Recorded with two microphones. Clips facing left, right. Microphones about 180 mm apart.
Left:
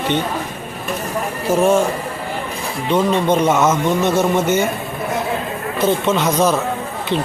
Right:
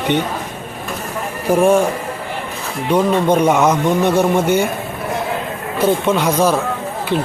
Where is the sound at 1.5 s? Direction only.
15° right (ahead or behind).